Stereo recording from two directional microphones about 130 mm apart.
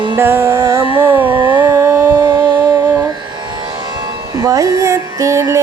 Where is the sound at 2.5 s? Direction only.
30° right (ahead or behind).